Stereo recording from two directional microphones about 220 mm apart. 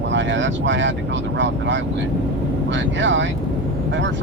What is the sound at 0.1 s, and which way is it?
Speech, 55° right (ahead or behind).